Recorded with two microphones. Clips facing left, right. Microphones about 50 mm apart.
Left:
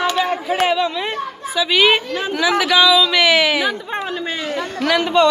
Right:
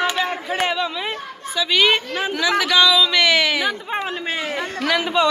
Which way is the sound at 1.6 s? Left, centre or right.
Centre.